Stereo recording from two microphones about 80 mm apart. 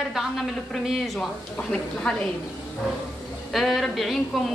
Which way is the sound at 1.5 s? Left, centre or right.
Centre.